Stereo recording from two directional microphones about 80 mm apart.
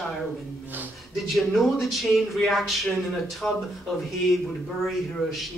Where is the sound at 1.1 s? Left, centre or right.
Centre.